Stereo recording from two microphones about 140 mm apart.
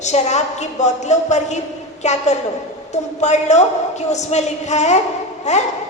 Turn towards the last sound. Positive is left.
turn(degrees=55)  # may be behind; listen again after turning